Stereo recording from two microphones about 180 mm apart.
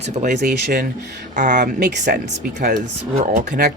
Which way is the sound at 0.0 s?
40° right (ahead or behind).